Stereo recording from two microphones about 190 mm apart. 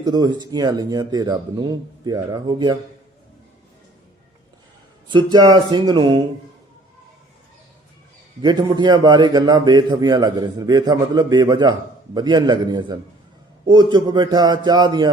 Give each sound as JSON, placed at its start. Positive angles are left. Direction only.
{"t": 0.0, "sound": "a man's voice", "side_deg": -20}
{"t": 5.1, "sound": "a man's voice", "side_deg": -20}
{"t": 8.4, "sound": "a man's voice", "side_deg": -20}